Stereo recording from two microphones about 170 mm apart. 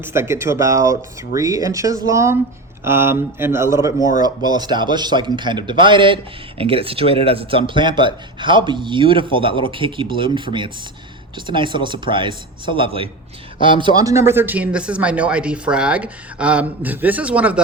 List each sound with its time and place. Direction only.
0.0 s speech: 15° right (ahead or behind)